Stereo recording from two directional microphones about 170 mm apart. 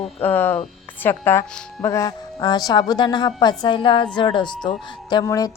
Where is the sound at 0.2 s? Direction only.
10° left (ahead or behind).